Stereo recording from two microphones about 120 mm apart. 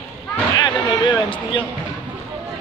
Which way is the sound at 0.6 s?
40° left (ahead or behind).